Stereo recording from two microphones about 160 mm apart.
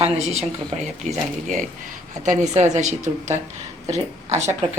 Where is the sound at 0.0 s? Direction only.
40° right (ahead or behind).